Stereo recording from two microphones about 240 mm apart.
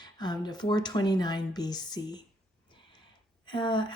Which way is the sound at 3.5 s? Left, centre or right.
Centre.